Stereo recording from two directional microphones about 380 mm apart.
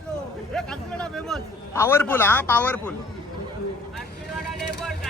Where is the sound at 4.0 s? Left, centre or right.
Centre.